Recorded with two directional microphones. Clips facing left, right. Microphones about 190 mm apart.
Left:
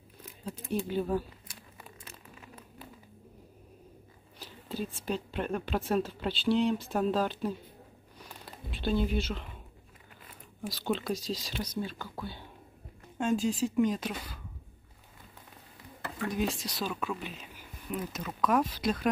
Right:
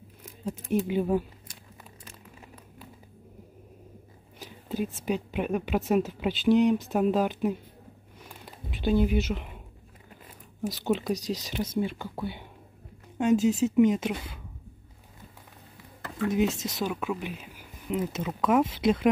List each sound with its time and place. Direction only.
0.7 s a woman's voice: 15° right (ahead or behind)
4.4 s a woman's voice: 15° right (ahead or behind)
8.8 s speech: 15° right (ahead or behind)
10.7 s speech: 20° right (ahead or behind)
16.3 s speech: 20° right (ahead or behind)
17.9 s speech: 25° right (ahead or behind)